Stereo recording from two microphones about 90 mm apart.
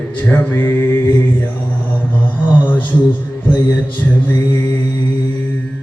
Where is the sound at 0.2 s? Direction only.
20° left (ahead or behind).